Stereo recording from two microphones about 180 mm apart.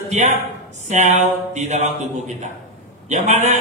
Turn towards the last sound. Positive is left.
turn(degrees=-40)  # may be behind; listen again after turning